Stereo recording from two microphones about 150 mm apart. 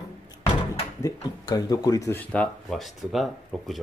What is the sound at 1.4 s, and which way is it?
Speech, 25° left (ahead or behind).